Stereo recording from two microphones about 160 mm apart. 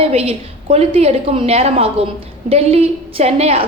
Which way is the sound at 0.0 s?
40° right (ahead or behind).